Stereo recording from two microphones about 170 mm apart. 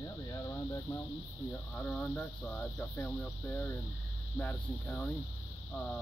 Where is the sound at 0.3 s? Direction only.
15° left (ahead or behind).